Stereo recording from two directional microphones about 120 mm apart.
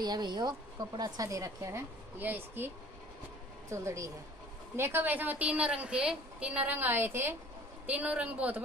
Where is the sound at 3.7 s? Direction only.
25° right (ahead or behind).